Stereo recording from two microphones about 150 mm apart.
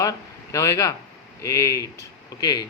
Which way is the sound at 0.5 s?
20° left (ahead or behind).